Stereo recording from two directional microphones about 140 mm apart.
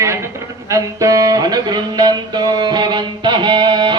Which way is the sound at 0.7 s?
25° right (ahead or behind).